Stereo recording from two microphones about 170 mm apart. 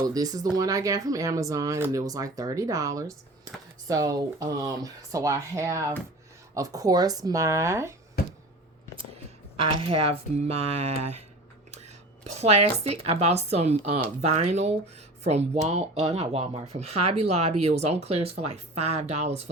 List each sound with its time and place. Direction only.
0.1 s speech: 20° right (ahead or behind)
9.8 s speech: 35° right (ahead or behind)
12.2 s speech: 40° right (ahead or behind)